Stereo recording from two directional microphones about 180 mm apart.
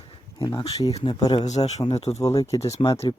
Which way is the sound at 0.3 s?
25° left (ahead or behind).